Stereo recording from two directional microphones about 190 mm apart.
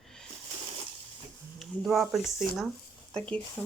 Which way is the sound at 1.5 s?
Centre (ahead or behind).